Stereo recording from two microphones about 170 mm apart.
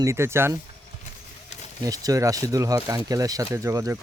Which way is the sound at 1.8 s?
20° right (ahead or behind).